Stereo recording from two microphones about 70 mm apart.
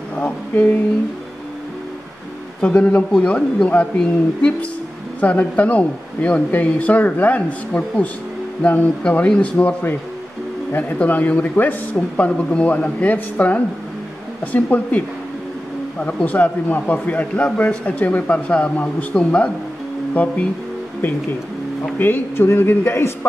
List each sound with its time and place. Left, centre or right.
2.6 s a man's voice: centre
10.8 s a man's voice: left
21.9 s a man's voice: left